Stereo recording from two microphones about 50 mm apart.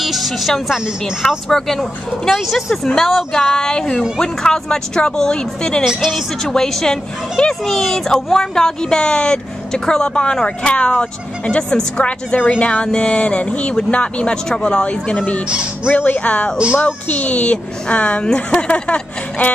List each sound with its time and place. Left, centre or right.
0.0 s speech: centre
3.4 s speech: centre
5.9 s speech: centre
6.1 s speech: centre; by 15.4 s left
15.4 s speech: right
15.9 s speech: left